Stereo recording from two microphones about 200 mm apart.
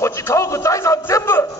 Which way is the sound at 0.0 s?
15° left (ahead or behind).